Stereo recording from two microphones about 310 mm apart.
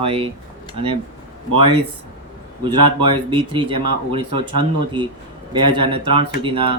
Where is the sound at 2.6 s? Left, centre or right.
Centre.